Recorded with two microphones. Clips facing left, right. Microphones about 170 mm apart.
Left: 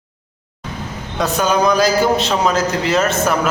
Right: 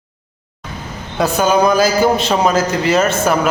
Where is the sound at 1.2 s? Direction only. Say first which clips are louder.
Right 3 dB; 5° right (ahead or behind).